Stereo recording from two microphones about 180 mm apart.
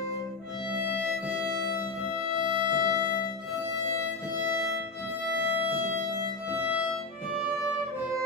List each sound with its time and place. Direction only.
2.2 s music: 25° right (ahead or behind)